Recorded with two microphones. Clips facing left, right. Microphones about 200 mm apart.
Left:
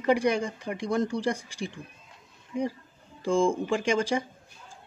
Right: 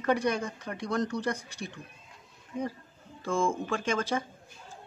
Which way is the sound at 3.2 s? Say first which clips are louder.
Left 5 dB; 15° left (ahead or behind).